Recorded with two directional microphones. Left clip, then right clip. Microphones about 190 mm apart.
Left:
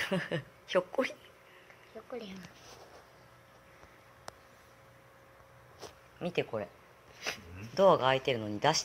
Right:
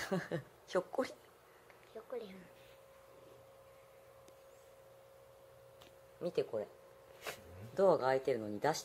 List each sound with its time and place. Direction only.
0.0 s a woman's voice: 15° right (ahead or behind)
6.2 s speech: 10° right (ahead or behind)
7.7 s speech: 10° right (ahead or behind)